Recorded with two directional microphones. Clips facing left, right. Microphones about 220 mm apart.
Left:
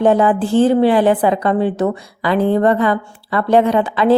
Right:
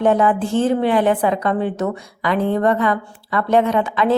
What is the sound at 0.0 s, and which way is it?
A woman's voice, 35° left (ahead or behind).